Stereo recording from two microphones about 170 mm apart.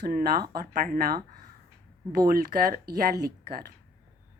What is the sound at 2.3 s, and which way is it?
A woman's voice, 60° right (ahead or behind).